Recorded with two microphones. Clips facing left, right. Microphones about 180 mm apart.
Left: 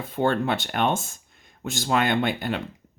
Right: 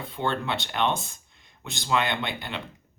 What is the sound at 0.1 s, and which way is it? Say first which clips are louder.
Speech: left 6 dB; 45° left (ahead or behind).